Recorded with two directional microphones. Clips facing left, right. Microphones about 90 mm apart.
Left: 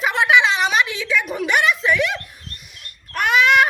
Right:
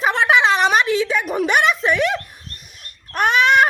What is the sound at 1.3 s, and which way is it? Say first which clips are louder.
Speech: right 4 dB; 45° right (ahead or behind).